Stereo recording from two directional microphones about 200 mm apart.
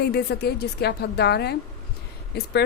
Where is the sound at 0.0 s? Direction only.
50° left (ahead or behind).